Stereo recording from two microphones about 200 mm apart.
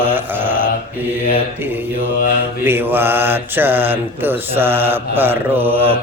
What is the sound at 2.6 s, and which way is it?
Mantra, 10° right (ahead or behind).